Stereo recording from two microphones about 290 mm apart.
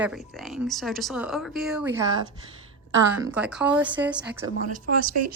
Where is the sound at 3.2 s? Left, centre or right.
Centre.